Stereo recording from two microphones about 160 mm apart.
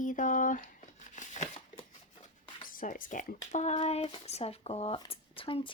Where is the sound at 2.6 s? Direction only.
60° left (ahead or behind).